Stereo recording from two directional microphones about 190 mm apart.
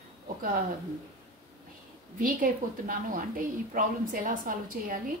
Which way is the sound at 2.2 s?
45° right (ahead or behind).